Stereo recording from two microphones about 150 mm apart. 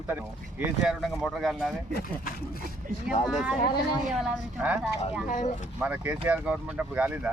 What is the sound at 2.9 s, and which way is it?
Speech, 65° right (ahead or behind).